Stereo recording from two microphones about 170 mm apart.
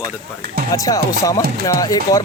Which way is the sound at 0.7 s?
20° left (ahead or behind).